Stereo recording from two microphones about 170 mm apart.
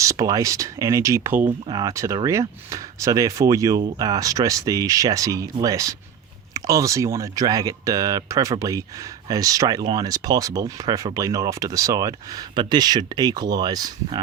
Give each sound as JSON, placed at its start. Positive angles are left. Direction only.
{"t": 0.0, "sound": "speech", "side_deg": -20}
{"t": 1.5, "sound": "speech", "side_deg": -25}